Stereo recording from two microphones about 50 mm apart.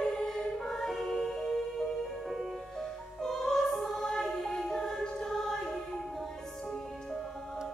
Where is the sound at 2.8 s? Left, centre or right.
Centre.